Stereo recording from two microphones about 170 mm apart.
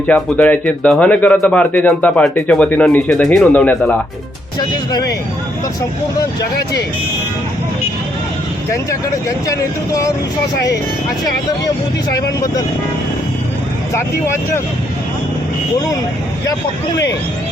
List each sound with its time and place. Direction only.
0.1 s speech: 10° left (ahead or behind)
4.6 s speech: 25° left (ahead or behind)
12.1 s speech: 20° left (ahead or behind)
13.9 s speech: 15° left (ahead or behind)